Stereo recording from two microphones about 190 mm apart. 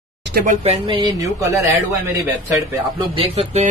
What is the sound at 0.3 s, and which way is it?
Speech, 50° right (ahead or behind).